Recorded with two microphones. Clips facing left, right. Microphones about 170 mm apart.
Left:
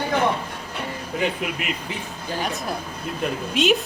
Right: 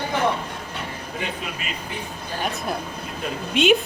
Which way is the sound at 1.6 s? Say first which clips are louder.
Left 4 dB; 65° left (ahead or behind).